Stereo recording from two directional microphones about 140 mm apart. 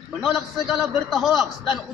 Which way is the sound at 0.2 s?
Centre (ahead or behind).